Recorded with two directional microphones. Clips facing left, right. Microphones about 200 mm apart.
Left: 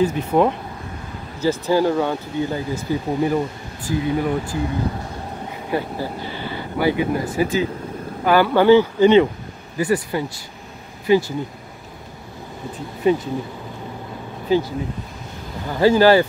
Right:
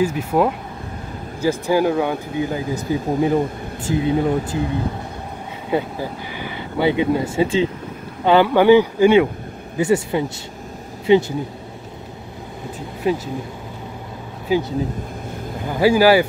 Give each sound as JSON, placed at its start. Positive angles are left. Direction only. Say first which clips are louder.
{"t": 0.0, "sound": "speech", "louder": "left 1 dB", "side_deg": -5}
{"t": 5.7, "sound": "speech", "louder": "right 2 dB", "side_deg": -15}
{"t": 9.8, "sound": "speech", "louder": "right 3 dB", "side_deg": -25}
{"t": 13.0, "sound": "speech", "louder": "left 3 dB", "side_deg": 0}
{"t": 14.5, "sound": "speech", "louder": "left 1 dB", "side_deg": -10}
{"t": 15.7, "sound": "speech", "louder": "even", "side_deg": -10}